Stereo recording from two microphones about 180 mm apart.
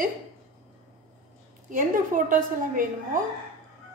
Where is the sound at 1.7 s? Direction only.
45° right (ahead or behind).